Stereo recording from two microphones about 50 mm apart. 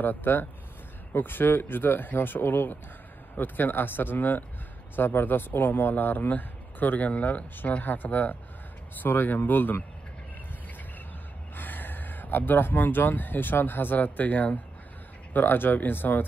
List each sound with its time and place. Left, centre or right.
0.0 s speech: left
11.5 s speech: left